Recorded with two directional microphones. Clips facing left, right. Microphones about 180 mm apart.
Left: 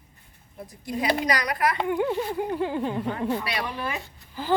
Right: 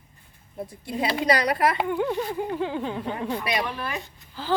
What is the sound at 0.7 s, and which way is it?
A child's voice, 25° right (ahead or behind).